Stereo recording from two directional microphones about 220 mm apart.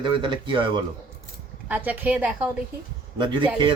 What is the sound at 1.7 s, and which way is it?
Speech, 5° right (ahead or behind).